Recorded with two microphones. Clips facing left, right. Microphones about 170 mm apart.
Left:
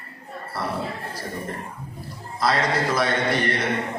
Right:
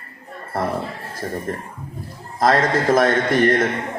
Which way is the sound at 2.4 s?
50° right (ahead or behind).